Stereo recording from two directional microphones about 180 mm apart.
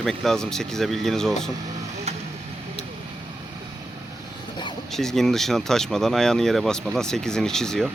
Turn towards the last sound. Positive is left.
turn(degrees=5)  # may be behind; listen again after turning